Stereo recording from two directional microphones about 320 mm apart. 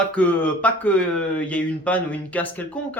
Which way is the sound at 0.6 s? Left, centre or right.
Centre.